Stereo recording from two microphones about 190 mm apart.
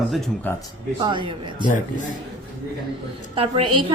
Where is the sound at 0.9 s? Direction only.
25° right (ahead or behind).